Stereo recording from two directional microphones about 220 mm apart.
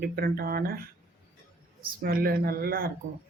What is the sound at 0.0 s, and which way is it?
Speech, 45° right (ahead or behind).